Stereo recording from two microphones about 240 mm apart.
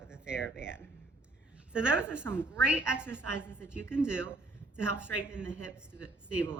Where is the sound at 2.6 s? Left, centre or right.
Centre.